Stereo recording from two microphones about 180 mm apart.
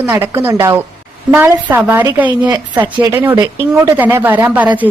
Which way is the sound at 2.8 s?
25° right (ahead or behind).